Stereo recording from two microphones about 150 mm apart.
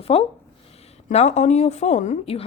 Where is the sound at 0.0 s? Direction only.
40° left (ahead or behind).